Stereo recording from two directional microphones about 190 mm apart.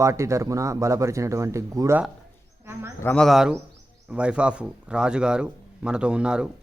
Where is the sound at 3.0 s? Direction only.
5° left (ahead or behind).